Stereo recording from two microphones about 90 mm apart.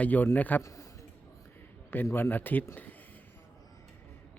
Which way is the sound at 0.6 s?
35° left (ahead or behind).